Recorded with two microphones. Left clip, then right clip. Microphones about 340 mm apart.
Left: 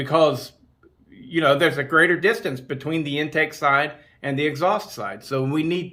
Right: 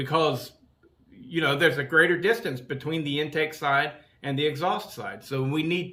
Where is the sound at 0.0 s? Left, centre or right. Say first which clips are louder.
Left 6 dB; centre.